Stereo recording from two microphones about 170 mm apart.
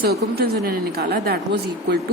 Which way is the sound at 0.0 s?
65° right (ahead or behind).